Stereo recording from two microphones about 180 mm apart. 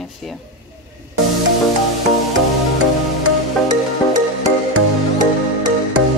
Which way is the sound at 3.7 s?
25° right (ahead or behind).